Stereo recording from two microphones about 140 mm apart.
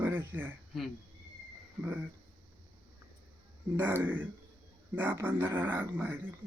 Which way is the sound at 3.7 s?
15° right (ahead or behind).